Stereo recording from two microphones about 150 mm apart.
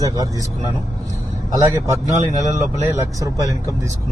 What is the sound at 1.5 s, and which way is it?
Speech, 20° right (ahead or behind).